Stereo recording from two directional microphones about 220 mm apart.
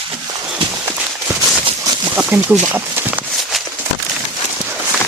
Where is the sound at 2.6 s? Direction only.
10° right (ahead or behind).